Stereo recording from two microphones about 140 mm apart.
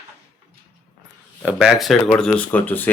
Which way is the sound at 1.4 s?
5° right (ahead or behind).